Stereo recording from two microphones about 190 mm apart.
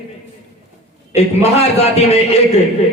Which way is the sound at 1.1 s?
35° left (ahead or behind).